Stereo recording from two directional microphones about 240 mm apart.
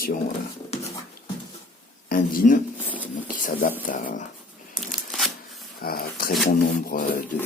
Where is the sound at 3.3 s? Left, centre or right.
Left.